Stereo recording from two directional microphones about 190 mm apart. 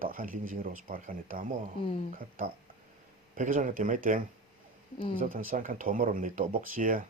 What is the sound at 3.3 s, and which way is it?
Speech, 45° right (ahead or behind).